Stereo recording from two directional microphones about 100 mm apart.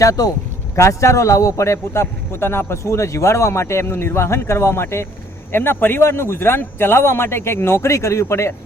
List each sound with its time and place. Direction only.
0.0 s speech: 35° left (ahead or behind)